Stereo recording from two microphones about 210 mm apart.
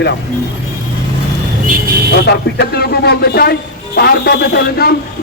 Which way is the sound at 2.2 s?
50° left (ahead or behind).